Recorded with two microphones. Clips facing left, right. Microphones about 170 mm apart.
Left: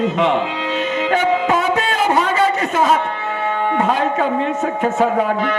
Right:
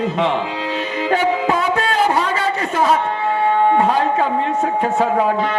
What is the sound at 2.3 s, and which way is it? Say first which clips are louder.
Speech: left 3 dB; 20° left (ahead or behind).